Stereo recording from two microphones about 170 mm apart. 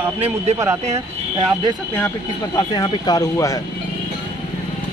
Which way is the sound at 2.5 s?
25° left (ahead or behind).